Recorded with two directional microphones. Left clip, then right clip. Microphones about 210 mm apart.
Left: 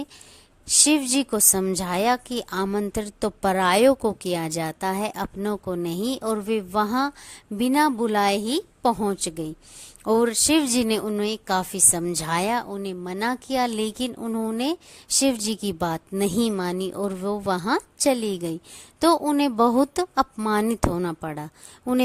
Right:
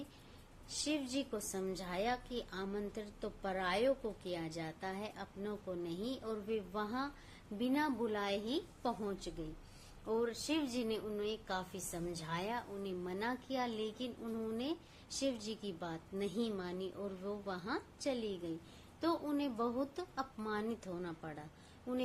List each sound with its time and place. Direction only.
0.9 s a woman's voice: 50° left (ahead or behind)